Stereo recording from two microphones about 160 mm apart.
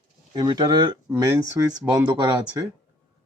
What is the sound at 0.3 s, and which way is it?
Speech, 25° right (ahead or behind).